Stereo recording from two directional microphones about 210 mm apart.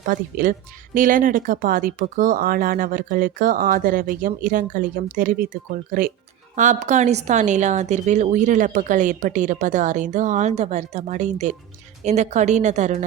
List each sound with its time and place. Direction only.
0.0 s speech: 40° right (ahead or behind)